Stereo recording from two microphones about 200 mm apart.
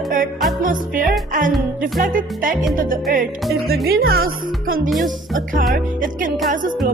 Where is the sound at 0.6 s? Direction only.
40° right (ahead or behind).